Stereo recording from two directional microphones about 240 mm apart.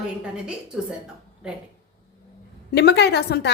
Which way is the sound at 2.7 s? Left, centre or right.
Left.